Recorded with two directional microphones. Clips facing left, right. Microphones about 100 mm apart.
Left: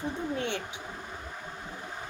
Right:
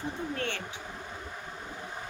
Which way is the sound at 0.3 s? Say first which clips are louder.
Left 2 dB; 15° left (ahead or behind).